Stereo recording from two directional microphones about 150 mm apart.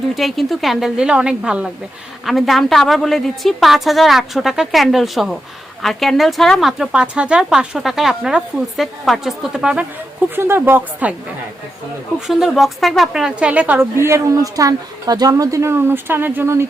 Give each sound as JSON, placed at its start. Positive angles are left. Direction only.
{"t": 0.1, "sound": "a woman's voice", "side_deg": 0}
{"t": 12.3, "sound": "a woman's voice", "side_deg": 0}